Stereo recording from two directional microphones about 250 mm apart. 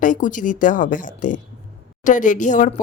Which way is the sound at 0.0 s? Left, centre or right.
Left.